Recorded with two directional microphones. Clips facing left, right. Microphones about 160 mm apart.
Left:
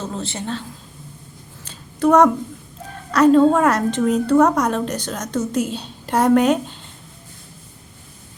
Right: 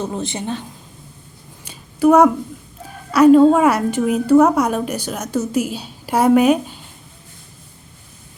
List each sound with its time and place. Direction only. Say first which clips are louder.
0.0 s a woman's voice: right 3 dB; 15° right (ahead or behind)
1.6 s a sound: right 4 dB; 10° right (ahead or behind)
3.1 s a woman's voice: right 3 dB; 10° right (ahead or behind)